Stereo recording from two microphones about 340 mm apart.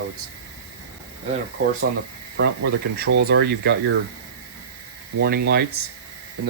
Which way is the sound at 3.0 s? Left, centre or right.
Right.